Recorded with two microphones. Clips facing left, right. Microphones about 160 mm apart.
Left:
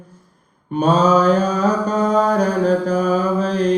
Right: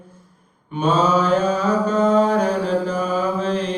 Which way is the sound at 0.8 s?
40° left (ahead or behind).